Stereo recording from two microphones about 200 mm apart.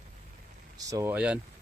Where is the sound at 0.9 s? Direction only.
15° right (ahead or behind).